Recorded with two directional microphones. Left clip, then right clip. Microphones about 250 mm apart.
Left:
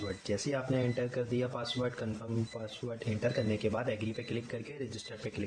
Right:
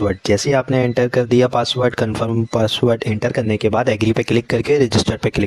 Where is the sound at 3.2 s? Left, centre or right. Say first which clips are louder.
Right 14 dB; right.